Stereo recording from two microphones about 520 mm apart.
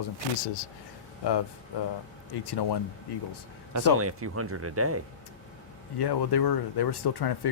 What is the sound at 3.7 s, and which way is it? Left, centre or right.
Speech, right.